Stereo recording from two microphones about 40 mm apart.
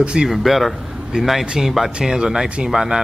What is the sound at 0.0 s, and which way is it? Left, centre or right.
Speech, right.